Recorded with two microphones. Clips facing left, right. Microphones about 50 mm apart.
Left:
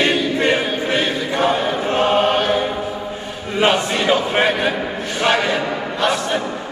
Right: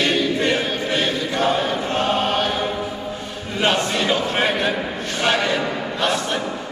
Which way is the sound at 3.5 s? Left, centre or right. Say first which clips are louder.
Left 3 dB; centre.